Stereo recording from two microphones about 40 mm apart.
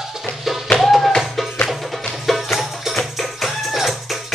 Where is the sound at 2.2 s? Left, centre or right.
Centre.